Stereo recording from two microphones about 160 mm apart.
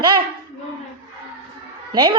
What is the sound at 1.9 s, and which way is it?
Child singing, 25° right (ahead or behind).